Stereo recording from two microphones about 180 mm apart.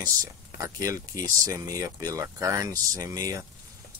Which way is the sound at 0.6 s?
15° right (ahead or behind).